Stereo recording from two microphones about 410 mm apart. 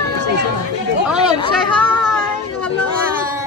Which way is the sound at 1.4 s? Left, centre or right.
Centre.